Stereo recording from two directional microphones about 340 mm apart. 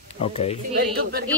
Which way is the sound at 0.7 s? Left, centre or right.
Right.